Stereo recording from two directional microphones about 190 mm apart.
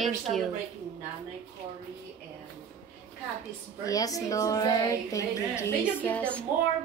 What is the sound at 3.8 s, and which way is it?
A woman's voice, 20° left (ahead or behind).